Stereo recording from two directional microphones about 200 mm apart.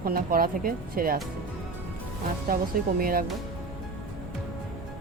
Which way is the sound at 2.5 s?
45° right (ahead or behind).